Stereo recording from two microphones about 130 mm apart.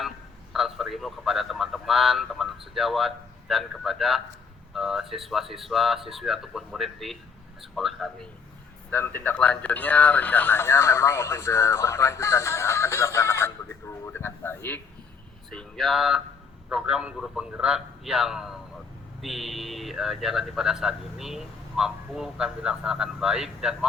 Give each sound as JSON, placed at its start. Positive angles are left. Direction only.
{"t": 0.5, "sound": "a man's voice", "side_deg": 0}
{"t": 8.9, "sound": "speech", "side_deg": 15}
{"t": 15.4, "sound": "a man's voice", "side_deg": 5}